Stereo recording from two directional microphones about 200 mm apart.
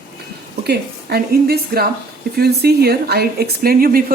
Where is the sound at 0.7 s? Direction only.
50° right (ahead or behind).